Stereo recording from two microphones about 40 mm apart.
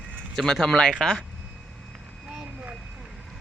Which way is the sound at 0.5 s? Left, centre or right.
Centre.